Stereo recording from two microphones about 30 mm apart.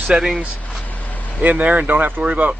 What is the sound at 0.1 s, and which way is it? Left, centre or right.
Speech, right.